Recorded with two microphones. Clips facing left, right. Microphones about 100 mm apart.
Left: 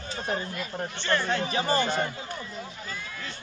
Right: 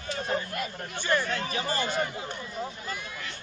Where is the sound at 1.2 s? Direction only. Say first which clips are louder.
Left 4 dB; 25° left (ahead or behind).